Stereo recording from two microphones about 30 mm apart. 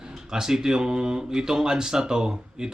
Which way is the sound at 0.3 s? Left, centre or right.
Centre.